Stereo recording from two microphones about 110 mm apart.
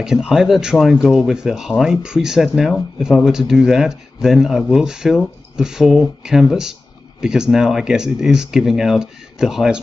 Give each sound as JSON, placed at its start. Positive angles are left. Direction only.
{"t": 0.0, "sound": "speech", "side_deg": -5}